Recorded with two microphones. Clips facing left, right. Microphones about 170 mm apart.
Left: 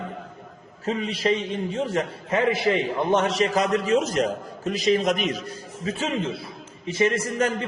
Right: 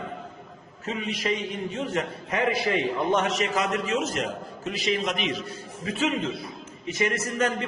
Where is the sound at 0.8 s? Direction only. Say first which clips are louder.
Left 5 dB; 35° left (ahead or behind).